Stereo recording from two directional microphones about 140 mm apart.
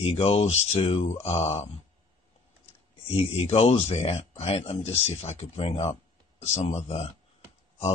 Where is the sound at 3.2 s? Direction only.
45° left (ahead or behind).